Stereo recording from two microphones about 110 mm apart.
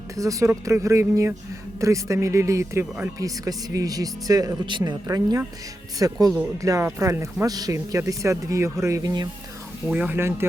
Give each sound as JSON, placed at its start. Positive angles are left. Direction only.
{"t": 0.2, "sound": "speech", "side_deg": -30}
{"t": 9.8, "sound": "speech", "side_deg": -15}